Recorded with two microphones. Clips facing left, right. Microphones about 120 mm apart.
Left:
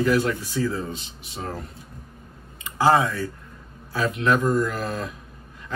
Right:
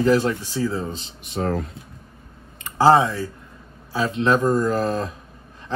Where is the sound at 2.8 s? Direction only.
25° right (ahead or behind).